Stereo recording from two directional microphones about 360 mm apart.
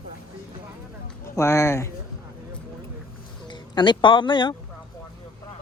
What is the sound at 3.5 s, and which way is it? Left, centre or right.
Speech, centre.